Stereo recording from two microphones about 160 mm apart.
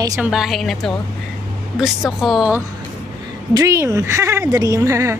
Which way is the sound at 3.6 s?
20° right (ahead or behind).